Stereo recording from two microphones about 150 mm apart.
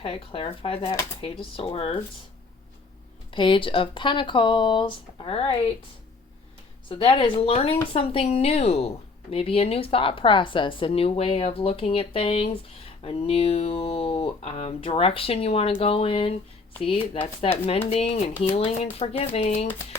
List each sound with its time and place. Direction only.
0.0 s a woman's voice: 40° left (ahead or behind)
3.3 s a woman's voice: 35° left (ahead or behind)
6.8 s a woman's voice: 35° left (ahead or behind)